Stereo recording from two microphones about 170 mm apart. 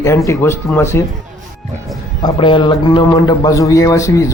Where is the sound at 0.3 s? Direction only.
15° left (ahead or behind).